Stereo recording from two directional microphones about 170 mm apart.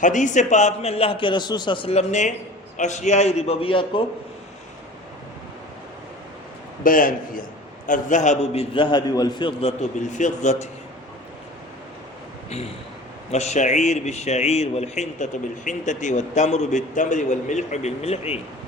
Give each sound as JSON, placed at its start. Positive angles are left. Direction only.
{"t": 0.0, "sound": "a man's voice", "side_deg": 45}
{"t": 6.8, "sound": "a man's voice", "side_deg": 55}
{"t": 13.3, "sound": "speech", "side_deg": 40}